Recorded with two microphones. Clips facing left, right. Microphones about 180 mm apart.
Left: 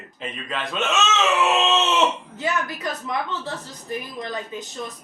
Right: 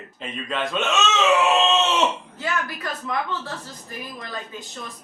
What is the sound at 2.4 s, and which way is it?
A woman's voice, 20° left (ahead or behind).